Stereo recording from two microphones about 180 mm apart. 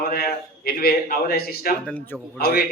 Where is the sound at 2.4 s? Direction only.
60° left (ahead or behind).